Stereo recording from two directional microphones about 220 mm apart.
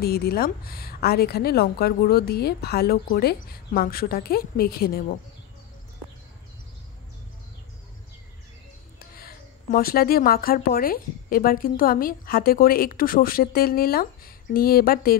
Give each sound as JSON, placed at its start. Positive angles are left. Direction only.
{"t": 0.0, "sound": "speech", "side_deg": 45}
{"t": 9.2, "sound": "speech", "side_deg": 40}